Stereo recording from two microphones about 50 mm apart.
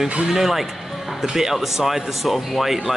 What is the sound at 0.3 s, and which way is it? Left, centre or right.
Speech, centre.